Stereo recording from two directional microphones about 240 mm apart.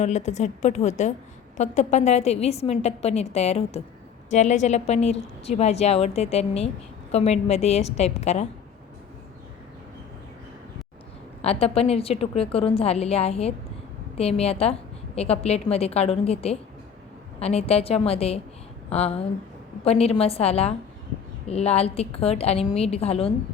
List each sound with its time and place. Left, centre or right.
0.0 s a woman's voice: left
11.4 s a woman's voice: left